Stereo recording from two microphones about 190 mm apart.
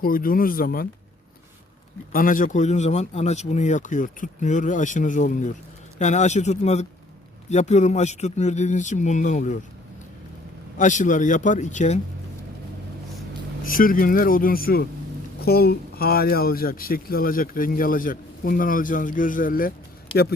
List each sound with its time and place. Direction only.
0.0 s speech: 50° left (ahead or behind)
2.1 s a man's voice: 45° left (ahead or behind)
10.8 s a man's voice: 40° left (ahead or behind)
13.7 s speech: 45° left (ahead or behind)